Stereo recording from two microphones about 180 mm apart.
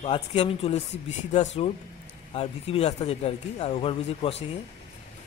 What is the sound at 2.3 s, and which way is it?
Speech, 35° left (ahead or behind).